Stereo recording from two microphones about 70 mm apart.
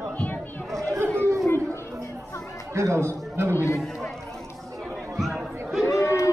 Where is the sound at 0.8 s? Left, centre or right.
Right.